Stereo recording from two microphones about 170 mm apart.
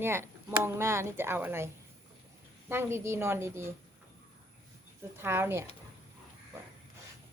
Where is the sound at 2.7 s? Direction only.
15° right (ahead or behind).